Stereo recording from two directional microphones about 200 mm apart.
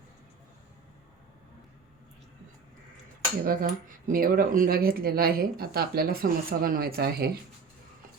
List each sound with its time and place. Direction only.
3.4 s speech: 45° right (ahead or behind)